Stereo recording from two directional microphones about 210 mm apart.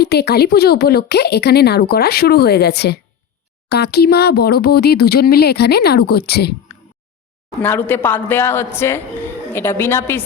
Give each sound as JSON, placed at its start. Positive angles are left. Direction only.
{"t": 0.0, "sound": "a woman's voice", "side_deg": 50}
{"t": 7.6, "sound": "a woman's voice", "side_deg": 10}